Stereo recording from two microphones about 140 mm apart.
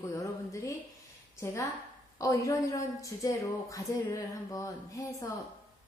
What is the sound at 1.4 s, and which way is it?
A woman's voice, 20° left (ahead or behind).